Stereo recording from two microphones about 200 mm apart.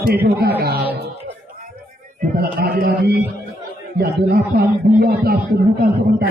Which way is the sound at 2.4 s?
50° right (ahead or behind).